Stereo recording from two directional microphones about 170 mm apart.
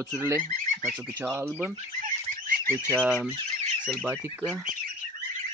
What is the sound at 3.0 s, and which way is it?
Speech, 5° left (ahead or behind).